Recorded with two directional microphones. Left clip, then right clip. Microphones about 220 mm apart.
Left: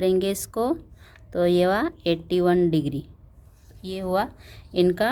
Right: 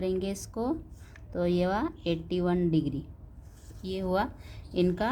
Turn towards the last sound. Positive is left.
turn(degrees=30)  # may be behind; listen again after turning